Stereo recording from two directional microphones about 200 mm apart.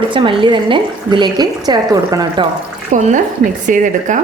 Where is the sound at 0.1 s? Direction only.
25° right (ahead or behind).